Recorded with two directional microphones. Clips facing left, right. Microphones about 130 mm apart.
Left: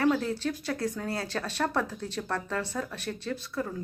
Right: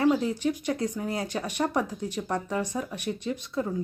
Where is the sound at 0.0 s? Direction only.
15° right (ahead or behind).